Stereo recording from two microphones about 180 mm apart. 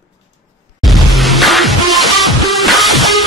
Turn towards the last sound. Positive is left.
turn(degrees=0)  # may be behind; listen again after turning